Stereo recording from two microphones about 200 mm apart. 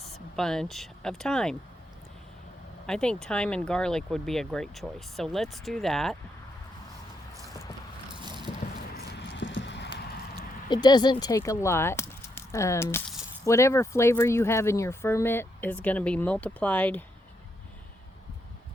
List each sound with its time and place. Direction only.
0.0 s speech: centre (ahead or behind)
2.8 s speech: 5° left (ahead or behind)
8.2 s a sound: 20° right (ahead or behind)
9.1 s clip-clop: 65° left (ahead or behind)
10.7 s speech: 20° left (ahead or behind)